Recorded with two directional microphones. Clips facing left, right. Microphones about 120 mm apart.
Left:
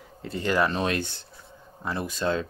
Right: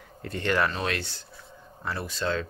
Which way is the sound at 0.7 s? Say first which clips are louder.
Left 4 dB; 20° left (ahead or behind).